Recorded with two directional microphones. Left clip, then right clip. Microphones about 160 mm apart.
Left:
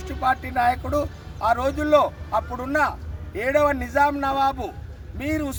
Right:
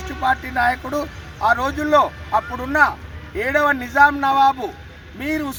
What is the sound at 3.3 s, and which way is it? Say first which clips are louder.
Speech: right 2 dB; 5° left (ahead or behind).